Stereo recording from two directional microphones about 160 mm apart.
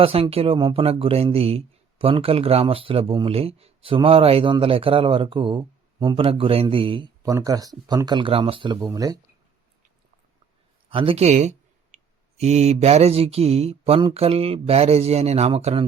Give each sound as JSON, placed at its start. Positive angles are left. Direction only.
{"t": 0.0, "sound": "speech", "side_deg": -35}
{"t": 10.8, "sound": "a sound", "side_deg": -35}
{"t": 12.4, "sound": "speech", "side_deg": -45}